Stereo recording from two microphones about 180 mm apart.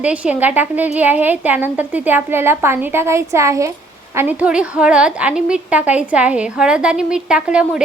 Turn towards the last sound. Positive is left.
turn(degrees=-5)  # may be behind; listen again after turning